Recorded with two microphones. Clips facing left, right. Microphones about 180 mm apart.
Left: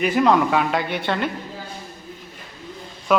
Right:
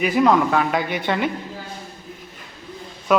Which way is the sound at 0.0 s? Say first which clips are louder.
Right 1 dB; centre (ahead or behind).